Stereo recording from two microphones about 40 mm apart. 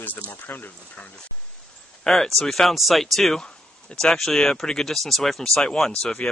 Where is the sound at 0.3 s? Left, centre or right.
Left.